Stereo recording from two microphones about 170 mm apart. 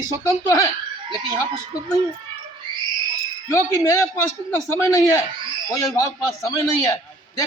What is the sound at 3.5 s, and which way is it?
A man's voice, 15° left (ahead or behind).